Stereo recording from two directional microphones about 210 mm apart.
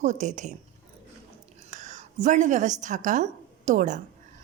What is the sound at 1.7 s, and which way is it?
A woman's voice, 35° right (ahead or behind).